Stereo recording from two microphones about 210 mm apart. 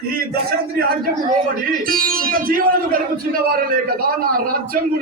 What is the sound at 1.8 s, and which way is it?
Speech, 45° right (ahead or behind).